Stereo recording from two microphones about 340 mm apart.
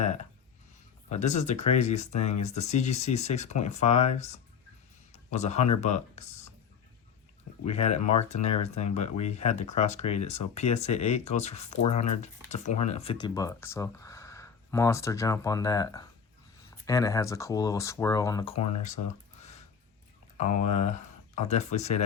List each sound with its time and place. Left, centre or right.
0.0 s a sound: centre
1.1 s speech: centre
7.6 s speech: centre
20.6 s speech: left